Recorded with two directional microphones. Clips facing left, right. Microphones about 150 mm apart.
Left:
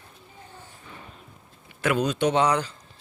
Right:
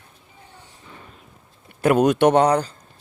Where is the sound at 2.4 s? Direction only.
40° right (ahead or behind).